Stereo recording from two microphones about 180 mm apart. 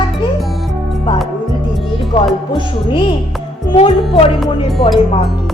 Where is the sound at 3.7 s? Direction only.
35° left (ahead or behind).